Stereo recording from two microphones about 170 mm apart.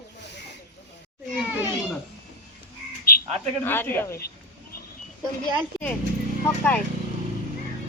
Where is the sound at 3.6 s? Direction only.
10° left (ahead or behind).